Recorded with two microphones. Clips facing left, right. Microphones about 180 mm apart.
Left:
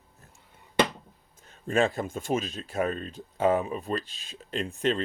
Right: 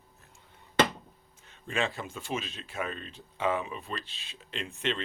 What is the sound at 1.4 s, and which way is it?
Speech, 40° left (ahead or behind).